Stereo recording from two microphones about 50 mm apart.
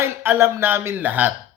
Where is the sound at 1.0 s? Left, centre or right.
Right.